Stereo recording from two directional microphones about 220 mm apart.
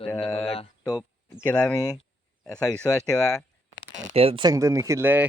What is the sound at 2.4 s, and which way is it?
Speech, 5° left (ahead or behind).